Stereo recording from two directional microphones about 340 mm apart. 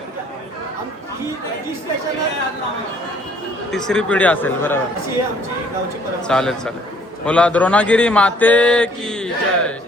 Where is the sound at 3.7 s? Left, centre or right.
Centre.